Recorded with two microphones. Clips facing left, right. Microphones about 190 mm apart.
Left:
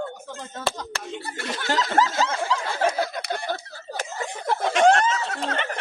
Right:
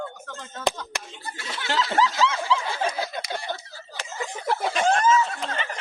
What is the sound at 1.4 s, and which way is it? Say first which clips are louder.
Snicker: left 1 dB; 45° left (ahead or behind).